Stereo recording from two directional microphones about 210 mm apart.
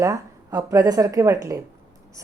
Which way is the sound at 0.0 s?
15° right (ahead or behind).